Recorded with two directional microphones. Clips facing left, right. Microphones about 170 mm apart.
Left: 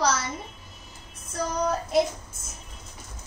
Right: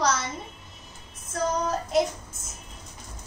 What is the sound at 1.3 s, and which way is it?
Speech, centre (ahead or behind).